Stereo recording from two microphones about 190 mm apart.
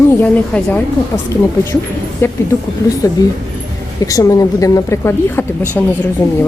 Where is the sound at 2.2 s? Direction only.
10° left (ahead or behind).